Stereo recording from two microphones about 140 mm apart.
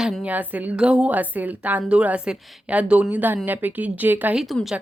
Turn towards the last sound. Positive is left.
turn(degrees=0)  # may be behind; listen again after turning